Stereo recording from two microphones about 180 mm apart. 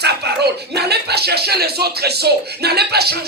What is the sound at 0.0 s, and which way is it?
Speech, 65° right (ahead or behind).